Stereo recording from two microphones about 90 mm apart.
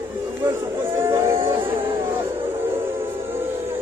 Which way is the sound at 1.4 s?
70° right (ahead or behind).